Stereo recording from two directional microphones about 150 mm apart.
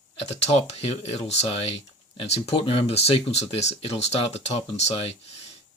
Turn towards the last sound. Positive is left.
turn(degrees=45)  # may be behind; listen again after turning